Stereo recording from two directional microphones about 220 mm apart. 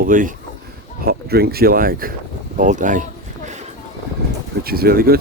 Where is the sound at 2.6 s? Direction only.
35° right (ahead or behind).